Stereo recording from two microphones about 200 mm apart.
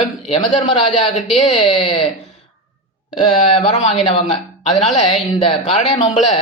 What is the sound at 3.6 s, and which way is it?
Speech, 30° left (ahead or behind).